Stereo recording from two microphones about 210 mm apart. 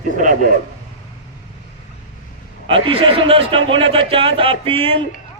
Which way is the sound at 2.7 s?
25° right (ahead or behind).